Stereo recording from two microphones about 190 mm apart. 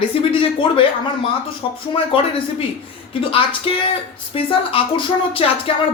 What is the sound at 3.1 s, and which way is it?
Speech, 30° left (ahead or behind).